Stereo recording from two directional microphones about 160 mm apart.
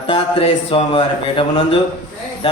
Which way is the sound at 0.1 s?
35° left (ahead or behind).